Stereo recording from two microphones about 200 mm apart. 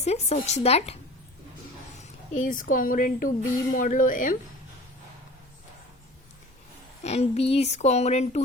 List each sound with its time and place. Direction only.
0.0 s speech: 35° left (ahead or behind)
2.0 s speech: 40° left (ahead or behind)
7.0 s speech: 35° left (ahead or behind)